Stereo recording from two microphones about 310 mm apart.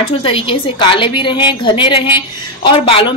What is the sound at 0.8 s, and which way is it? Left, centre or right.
A woman's voice, centre.